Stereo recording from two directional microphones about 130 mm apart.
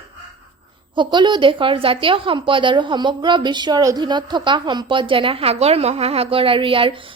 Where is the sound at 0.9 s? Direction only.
35° right (ahead or behind).